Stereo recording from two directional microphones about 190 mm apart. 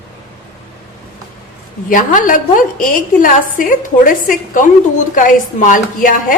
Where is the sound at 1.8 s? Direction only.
45° left (ahead or behind).